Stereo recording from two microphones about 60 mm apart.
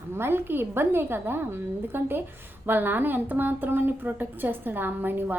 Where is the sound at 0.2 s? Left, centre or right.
Right.